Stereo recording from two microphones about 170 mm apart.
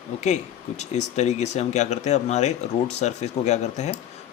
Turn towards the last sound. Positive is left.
turn(degrees=40)  # may be behind; listen again after turning